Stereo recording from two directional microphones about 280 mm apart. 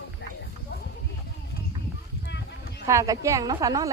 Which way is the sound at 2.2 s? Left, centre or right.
Left.